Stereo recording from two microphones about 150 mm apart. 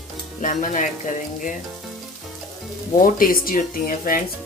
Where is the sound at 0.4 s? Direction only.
60° left (ahead or behind).